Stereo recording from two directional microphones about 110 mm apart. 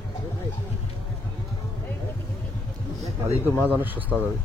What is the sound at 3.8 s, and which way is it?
Speech, 15° right (ahead or behind).